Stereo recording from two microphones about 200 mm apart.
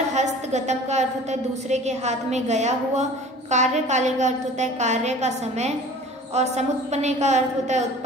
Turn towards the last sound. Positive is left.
turn(degrees=-35)  # may be behind; listen again after turning